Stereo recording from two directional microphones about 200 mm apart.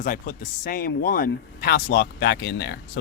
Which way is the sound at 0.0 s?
45° left (ahead or behind).